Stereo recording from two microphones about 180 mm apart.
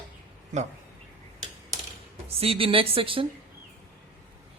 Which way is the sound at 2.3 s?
30° right (ahead or behind).